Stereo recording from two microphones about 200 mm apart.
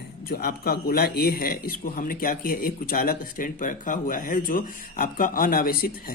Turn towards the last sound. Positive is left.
turn(degrees=50)  # may be behind; listen again after turning